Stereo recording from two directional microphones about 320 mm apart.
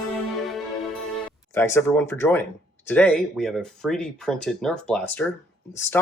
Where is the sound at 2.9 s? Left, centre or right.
Centre.